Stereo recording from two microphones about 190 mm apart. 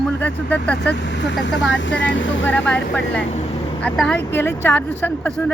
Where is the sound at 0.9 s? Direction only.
65° left (ahead or behind).